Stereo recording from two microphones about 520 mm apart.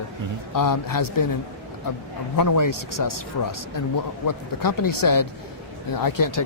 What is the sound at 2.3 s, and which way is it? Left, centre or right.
Speech, left.